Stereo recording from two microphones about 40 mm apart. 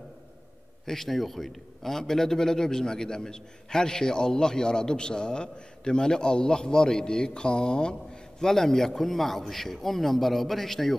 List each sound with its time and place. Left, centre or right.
0.8 s a man's voice: centre